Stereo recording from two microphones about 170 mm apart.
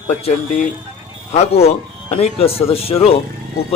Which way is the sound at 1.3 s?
35° left (ahead or behind).